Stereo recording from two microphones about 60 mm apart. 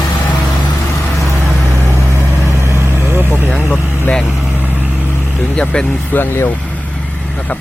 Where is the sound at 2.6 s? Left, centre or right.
Right.